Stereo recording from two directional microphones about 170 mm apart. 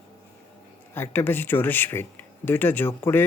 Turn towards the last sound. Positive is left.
turn(degrees=15)  # may be behind; listen again after turning